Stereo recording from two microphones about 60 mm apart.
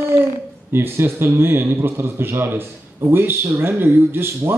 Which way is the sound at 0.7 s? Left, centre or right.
Right.